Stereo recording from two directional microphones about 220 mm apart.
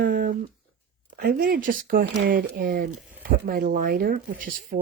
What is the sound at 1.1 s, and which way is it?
Speech, 40° right (ahead or behind).